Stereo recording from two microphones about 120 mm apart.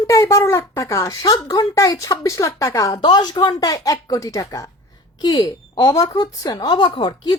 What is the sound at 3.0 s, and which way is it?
Speech, 35° left (ahead or behind).